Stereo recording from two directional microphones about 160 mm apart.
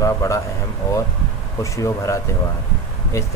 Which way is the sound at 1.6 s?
20° left (ahead or behind).